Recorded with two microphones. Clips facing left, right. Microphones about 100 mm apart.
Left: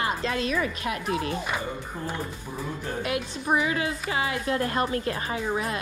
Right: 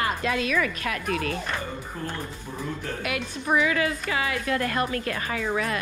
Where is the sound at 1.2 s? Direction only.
15° left (ahead or behind).